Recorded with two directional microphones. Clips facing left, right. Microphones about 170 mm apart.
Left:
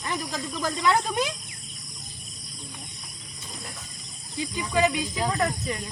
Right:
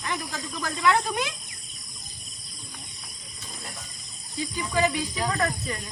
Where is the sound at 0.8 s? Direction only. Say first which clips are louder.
Right 1 dB; 35° left (ahead or behind).